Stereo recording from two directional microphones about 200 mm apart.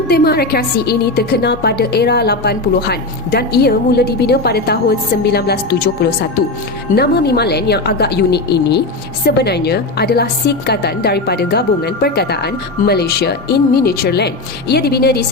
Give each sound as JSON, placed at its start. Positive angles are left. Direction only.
{"t": 0.1, "sound": "a woman's voice", "side_deg": 50}